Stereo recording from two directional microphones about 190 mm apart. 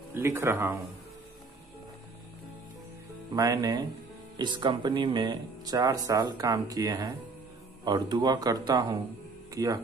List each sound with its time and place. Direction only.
0.1 s speech: 10° right (ahead or behind)
3.3 s speech: 20° right (ahead or behind)